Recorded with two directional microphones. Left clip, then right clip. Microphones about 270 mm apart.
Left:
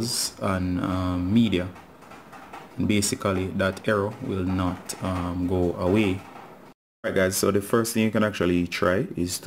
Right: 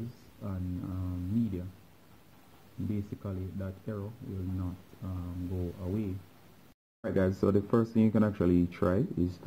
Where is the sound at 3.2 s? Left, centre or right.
Centre.